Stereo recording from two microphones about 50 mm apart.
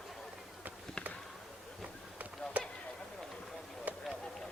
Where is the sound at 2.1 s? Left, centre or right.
Right.